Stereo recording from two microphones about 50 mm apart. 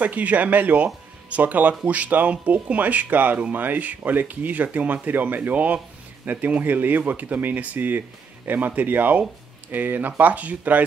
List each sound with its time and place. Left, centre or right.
0.0 s speech: right